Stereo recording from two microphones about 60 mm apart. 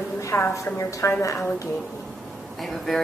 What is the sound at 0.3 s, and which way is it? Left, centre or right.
Speech, left.